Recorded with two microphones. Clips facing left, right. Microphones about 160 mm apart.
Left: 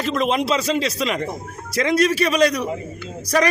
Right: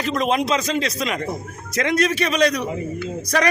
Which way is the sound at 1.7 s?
30° left (ahead or behind).